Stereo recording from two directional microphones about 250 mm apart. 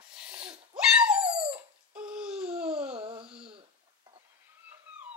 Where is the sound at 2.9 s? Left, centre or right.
Right.